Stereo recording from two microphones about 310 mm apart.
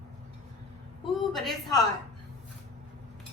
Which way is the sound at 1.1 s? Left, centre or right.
Centre.